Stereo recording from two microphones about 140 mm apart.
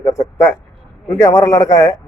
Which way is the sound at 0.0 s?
20° left (ahead or behind).